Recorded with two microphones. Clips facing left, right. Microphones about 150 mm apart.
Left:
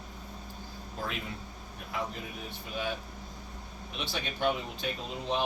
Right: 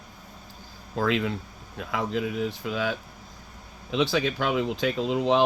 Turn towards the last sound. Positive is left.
turn(degrees=-90)